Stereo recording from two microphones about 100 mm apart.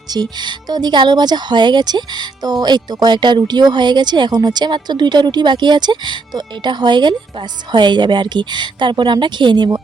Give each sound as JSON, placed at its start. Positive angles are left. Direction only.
{"t": 0.1, "sound": "speech", "side_deg": -45}